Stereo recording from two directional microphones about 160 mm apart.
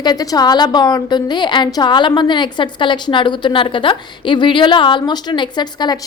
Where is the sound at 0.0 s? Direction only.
25° left (ahead or behind).